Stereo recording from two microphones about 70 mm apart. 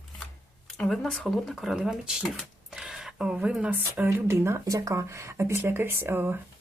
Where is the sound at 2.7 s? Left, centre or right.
Centre.